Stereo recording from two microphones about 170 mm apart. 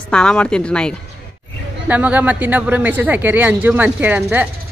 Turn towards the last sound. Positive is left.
turn(degrees=-10)  # may be behind; listen again after turning